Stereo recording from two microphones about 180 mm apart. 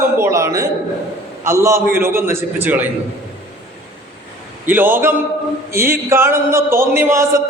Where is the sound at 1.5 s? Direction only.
15° right (ahead or behind).